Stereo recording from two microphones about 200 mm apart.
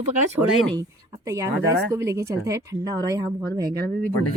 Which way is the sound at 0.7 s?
15° right (ahead or behind).